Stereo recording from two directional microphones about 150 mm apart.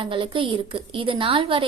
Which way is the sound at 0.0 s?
35° right (ahead or behind).